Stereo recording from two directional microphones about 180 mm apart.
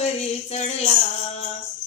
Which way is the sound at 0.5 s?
35° left (ahead or behind).